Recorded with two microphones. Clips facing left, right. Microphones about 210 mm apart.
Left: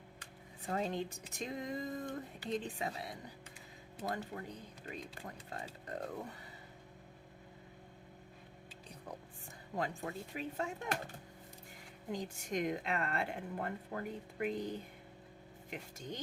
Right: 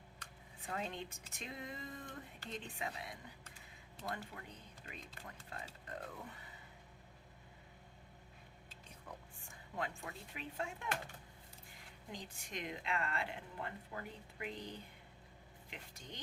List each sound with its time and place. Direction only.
0.7 s speech: 40° left (ahead or behind)
9.7 s speech: 40° left (ahead or behind)
12.1 s a woman's voice: 45° left (ahead or behind)